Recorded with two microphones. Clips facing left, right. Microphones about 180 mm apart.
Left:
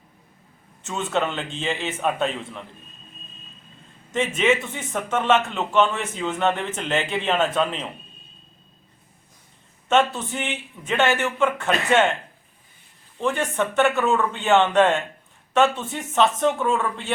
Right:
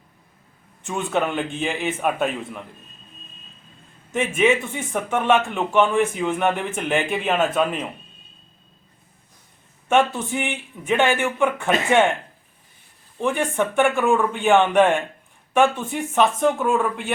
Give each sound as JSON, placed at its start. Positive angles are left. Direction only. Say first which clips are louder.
{"t": 0.8, "sound": "speech", "louder": "right 1 dB", "side_deg": -15}
{"t": 4.1, "sound": "speech", "louder": "right 2 dB", "side_deg": -10}
{"t": 9.9, "sound": "speech", "louder": "right 1 dB", "side_deg": -10}
{"t": 13.1, "sound": "speech", "louder": "right 2 dB", "side_deg": -15}